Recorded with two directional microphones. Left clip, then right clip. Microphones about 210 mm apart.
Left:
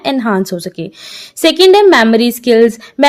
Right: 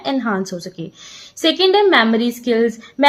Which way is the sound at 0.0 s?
45° left (ahead or behind).